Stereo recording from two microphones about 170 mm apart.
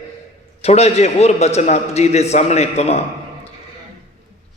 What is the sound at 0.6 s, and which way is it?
A man's voice, 40° left (ahead or behind).